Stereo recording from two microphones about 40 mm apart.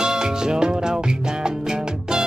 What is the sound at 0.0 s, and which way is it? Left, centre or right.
Music, centre.